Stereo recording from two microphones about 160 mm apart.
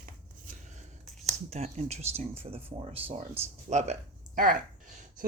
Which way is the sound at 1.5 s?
40° right (ahead or behind).